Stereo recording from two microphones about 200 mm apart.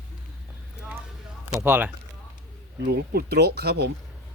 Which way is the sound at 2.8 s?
50° right (ahead or behind).